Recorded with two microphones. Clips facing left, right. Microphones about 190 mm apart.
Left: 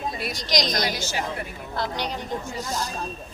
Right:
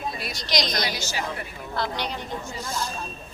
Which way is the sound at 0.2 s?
50° left (ahead or behind).